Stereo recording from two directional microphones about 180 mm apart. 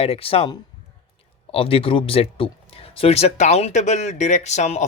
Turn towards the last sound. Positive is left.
turn(degrees=40)  # may be behind; listen again after turning